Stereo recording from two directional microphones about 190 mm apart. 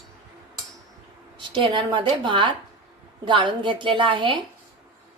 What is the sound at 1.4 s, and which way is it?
Speech, 25° right (ahead or behind).